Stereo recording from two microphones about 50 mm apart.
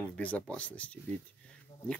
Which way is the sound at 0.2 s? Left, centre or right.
Left.